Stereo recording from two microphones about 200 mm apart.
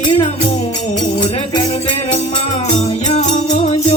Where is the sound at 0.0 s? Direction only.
25° left (ahead or behind).